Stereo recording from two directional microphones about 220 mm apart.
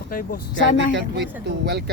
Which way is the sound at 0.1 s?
40° left (ahead or behind).